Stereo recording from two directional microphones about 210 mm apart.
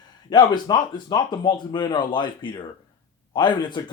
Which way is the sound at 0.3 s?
20° left (ahead or behind).